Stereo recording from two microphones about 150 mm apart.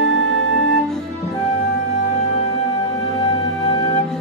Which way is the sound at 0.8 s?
5° left (ahead or behind).